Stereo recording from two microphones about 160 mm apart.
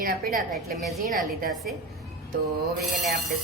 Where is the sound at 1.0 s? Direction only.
55° right (ahead or behind).